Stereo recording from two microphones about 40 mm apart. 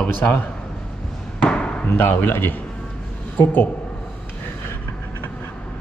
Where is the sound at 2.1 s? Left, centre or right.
Left.